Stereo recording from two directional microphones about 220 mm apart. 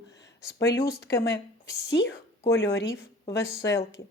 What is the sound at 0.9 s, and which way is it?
Speech, 50° left (ahead or behind).